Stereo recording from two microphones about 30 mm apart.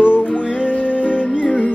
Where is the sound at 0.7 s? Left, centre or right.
Left.